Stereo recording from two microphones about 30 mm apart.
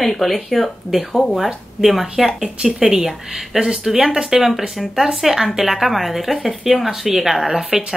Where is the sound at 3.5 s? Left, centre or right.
Right.